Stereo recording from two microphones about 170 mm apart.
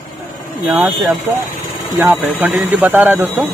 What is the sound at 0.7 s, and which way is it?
Speech, 10° right (ahead or behind).